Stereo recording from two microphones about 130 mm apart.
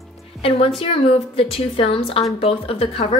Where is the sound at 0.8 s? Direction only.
45° left (ahead or behind).